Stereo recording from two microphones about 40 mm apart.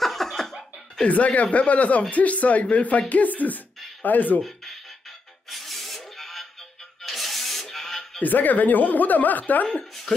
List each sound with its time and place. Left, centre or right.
0.0 s cough: centre
1.0 s a woman's voice: left
5.5 s a sound: centre
7.0 s music: centre
8.2 s a woman's voice: left